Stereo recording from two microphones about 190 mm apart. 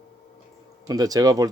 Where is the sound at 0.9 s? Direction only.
20° right (ahead or behind).